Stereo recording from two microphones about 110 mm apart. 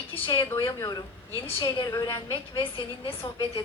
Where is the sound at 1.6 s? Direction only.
35° left (ahead or behind).